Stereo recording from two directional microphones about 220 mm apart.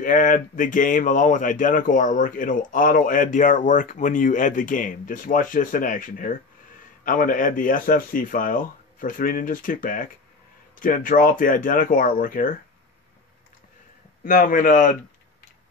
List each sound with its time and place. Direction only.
0.0 s speech: 35° left (ahead or behind)
14.2 s speech: 40° left (ahead or behind)